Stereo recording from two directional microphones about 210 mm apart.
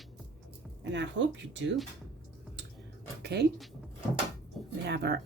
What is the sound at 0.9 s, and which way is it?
Speech, 60° right (ahead or behind).